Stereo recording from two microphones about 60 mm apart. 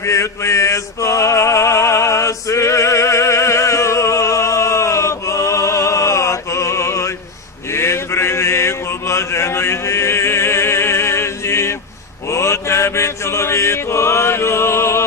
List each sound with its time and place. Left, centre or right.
0.0 s male singing: left
7.7 s mantra: left